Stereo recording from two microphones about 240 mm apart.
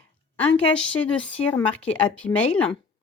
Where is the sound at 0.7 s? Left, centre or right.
Centre.